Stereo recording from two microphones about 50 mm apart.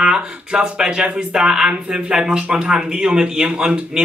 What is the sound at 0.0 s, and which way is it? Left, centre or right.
Speech, centre.